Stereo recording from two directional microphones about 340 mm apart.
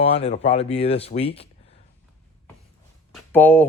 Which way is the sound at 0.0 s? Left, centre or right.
Centre.